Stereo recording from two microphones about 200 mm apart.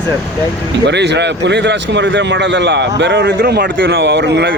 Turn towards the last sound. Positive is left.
turn(degrees=-60)  # may be behind; listen again after turning